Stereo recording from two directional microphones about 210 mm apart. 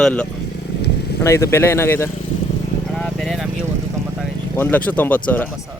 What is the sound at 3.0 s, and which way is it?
Vehicle, centre (ahead or behind).